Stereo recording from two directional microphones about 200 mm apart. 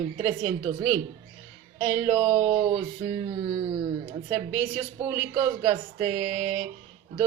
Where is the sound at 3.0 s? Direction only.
20° right (ahead or behind).